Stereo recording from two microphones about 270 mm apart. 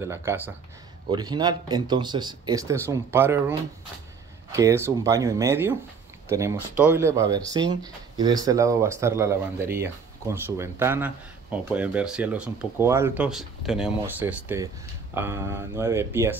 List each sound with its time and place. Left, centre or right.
0.0 s speech: centre